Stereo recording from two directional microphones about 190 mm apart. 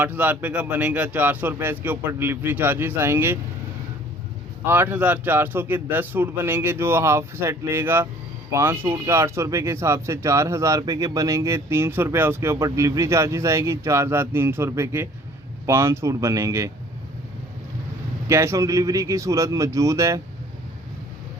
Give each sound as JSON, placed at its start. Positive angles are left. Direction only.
{"t": 0.0, "sound": "speech", "side_deg": -10}
{"t": 4.6, "sound": "speech", "side_deg": -10}
{"t": 18.3, "sound": "speech", "side_deg": -15}